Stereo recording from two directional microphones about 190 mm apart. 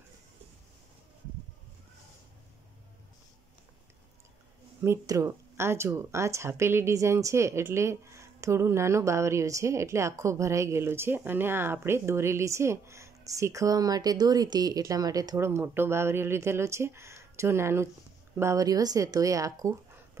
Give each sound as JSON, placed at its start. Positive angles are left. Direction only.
{"t": 4.8, "sound": "speech", "side_deg": -15}